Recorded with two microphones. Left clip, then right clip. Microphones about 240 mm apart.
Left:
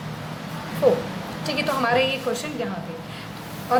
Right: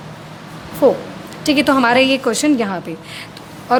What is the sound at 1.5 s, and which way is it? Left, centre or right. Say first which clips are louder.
A woman's voice: right 9 dB; right.